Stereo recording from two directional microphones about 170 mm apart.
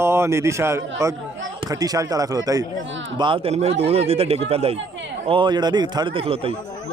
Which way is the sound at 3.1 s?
30° right (ahead or behind).